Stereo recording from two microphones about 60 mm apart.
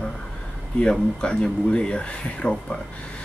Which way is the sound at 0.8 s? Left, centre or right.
Centre.